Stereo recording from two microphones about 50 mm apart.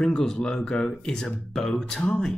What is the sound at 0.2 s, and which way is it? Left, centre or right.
Speech, centre.